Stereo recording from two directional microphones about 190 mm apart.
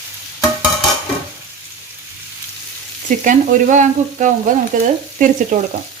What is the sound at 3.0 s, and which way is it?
Frying, 40° right (ahead or behind).